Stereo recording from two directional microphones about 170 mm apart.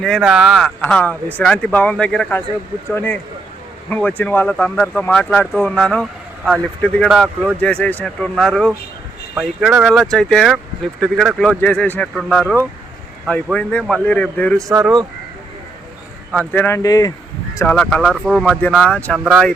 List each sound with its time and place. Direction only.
0.0 s speech: centre (ahead or behind)
16.4 s speech: 10° left (ahead or behind)
17.7 s speech: 5° left (ahead or behind)
19.2 s speech: 5° right (ahead or behind)